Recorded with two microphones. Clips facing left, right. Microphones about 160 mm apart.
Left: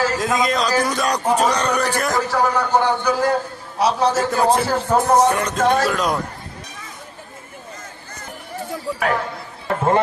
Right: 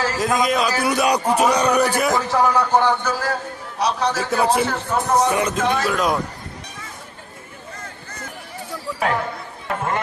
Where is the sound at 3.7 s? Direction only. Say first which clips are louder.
Left 3 dB; 25° left (ahead or behind).